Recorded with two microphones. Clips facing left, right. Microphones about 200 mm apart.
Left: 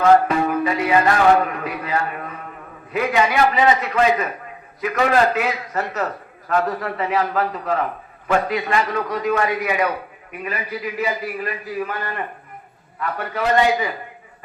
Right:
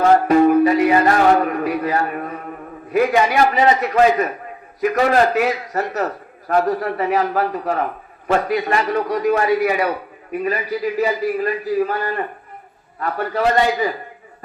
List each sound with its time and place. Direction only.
0.0 s music: 40° right (ahead or behind)